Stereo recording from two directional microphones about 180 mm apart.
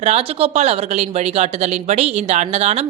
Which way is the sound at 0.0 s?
35° right (ahead or behind).